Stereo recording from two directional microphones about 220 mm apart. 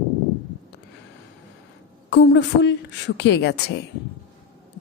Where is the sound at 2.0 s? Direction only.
55° left (ahead or behind).